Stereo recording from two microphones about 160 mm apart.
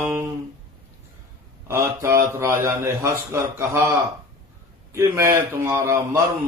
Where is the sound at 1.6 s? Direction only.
15° right (ahead or behind).